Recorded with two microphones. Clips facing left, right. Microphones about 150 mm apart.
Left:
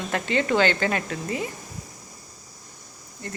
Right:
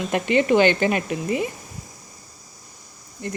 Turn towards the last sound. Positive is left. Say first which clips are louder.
# right 6 dB
turn(degrees=-20)  # may be behind; listen again after turning